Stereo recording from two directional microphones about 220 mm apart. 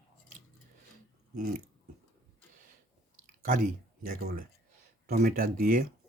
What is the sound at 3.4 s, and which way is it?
Speech, 40° right (ahead or behind).